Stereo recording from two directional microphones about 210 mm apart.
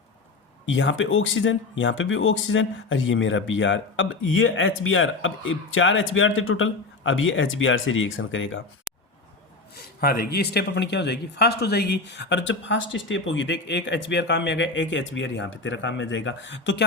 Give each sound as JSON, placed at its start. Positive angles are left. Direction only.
{"t": 0.6, "sound": "speech", "side_deg": 65}
{"t": 8.9, "sound": "a sound", "side_deg": -5}
{"t": 9.7, "sound": "speech", "side_deg": 45}